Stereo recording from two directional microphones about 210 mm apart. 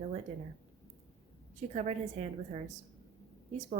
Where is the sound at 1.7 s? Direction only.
35° right (ahead or behind).